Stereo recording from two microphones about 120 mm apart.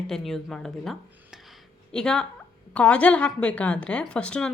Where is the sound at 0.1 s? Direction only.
5° left (ahead or behind).